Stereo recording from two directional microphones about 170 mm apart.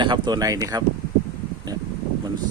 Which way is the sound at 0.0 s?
25° right (ahead or behind).